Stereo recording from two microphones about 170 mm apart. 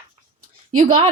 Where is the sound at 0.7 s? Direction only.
50° right (ahead or behind).